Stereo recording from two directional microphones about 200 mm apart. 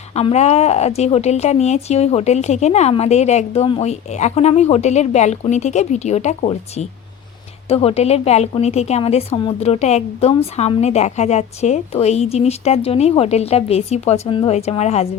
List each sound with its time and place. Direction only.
0.1 s a woman's voice: 30° left (ahead or behind)